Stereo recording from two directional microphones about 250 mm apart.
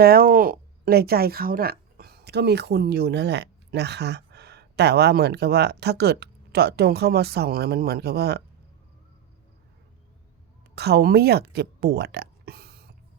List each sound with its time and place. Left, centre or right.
0.0 s a woman's voice: right
10.8 s speech: right